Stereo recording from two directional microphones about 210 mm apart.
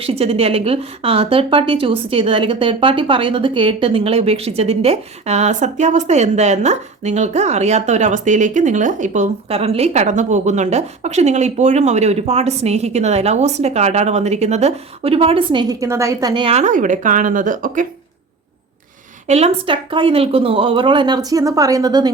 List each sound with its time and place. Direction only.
0.0 s a woman's voice: 30° right (ahead or behind)
19.3 s speech: 30° right (ahead or behind)